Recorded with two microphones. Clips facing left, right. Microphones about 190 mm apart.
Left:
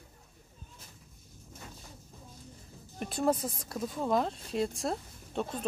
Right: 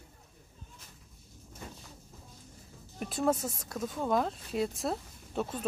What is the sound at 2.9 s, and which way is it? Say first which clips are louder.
Speech: even; centre (ahead or behind).